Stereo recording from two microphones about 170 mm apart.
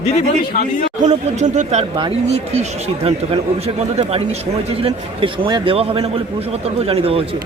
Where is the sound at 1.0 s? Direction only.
40° right (ahead or behind).